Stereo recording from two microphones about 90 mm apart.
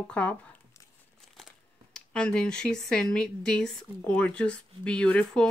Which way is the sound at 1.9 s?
10° left (ahead or behind).